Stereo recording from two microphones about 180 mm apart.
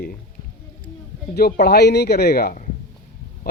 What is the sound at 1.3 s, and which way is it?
Speech, 60° left (ahead or behind).